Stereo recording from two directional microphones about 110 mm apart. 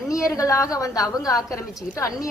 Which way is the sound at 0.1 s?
30° left (ahead or behind).